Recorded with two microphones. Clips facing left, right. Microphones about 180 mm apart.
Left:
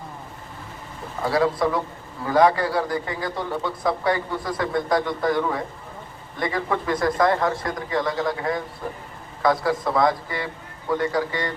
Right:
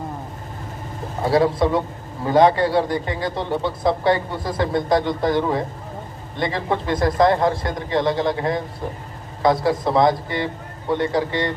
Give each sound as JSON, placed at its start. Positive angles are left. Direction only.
{"t": 1.2, "sound": "a man's voice", "side_deg": -25}